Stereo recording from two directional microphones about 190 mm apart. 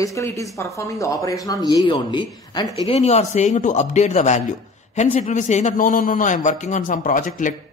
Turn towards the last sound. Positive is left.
turn(degrees=45)  # may be behind; listen again after turning